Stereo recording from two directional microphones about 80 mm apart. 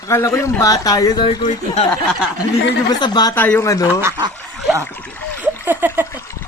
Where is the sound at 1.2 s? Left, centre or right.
Left.